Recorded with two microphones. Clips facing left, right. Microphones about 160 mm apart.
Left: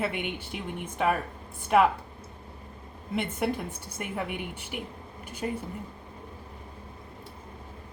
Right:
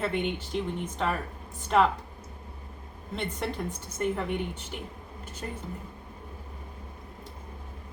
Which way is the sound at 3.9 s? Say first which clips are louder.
Right 5 dB; 10° left (ahead or behind).